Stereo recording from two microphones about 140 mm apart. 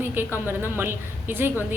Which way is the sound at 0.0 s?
15° right (ahead or behind).